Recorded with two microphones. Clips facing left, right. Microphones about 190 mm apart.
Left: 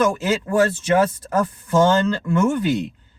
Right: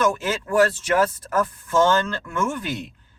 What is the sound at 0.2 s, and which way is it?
Speech, 25° left (ahead or behind).